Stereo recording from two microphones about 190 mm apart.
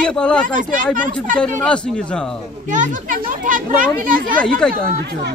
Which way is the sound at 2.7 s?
40° right (ahead or behind).